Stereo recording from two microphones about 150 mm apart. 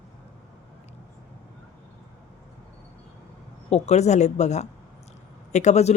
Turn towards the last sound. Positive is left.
turn(degrees=50)  # may be behind; listen again after turning